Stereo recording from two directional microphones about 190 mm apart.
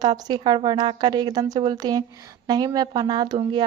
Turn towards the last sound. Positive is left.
turn(degrees=-20)  # may be behind; listen again after turning